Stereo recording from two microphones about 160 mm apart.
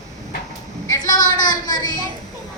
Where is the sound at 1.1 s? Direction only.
25° left (ahead or behind).